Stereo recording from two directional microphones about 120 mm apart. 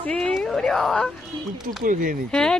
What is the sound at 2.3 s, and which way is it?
Speech, 5° left (ahead or behind).